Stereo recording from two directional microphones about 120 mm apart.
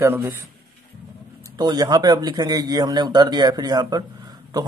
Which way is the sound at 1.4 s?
35° right (ahead or behind).